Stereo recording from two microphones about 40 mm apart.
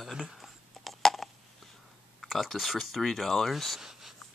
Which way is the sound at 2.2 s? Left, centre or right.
Centre.